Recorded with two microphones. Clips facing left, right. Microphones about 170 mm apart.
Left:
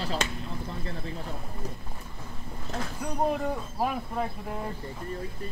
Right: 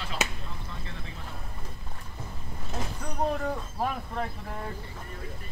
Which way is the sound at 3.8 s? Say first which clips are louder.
Left 2 dB; 5° left (ahead or behind).